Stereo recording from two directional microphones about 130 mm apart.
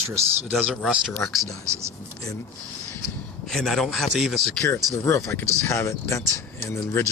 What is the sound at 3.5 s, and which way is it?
A man's voice, 5° left (ahead or behind).